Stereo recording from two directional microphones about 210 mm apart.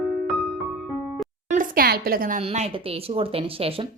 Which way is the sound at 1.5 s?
40° right (ahead or behind).